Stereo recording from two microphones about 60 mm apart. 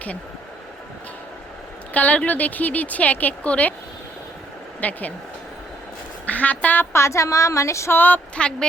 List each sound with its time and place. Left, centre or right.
1.9 s speech: left
4.8 s speech: left
6.2 s speech: left
6.9 s speech: left
7.9 s speech: left
8.4 s speech: centre